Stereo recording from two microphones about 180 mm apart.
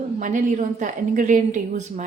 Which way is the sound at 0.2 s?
45° right (ahead or behind).